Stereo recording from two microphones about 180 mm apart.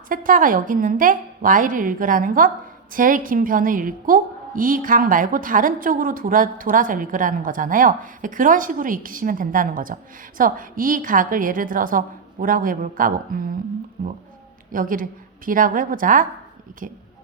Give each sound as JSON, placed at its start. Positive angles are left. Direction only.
{"t": 0.1, "sound": "a woman's voice", "side_deg": -50}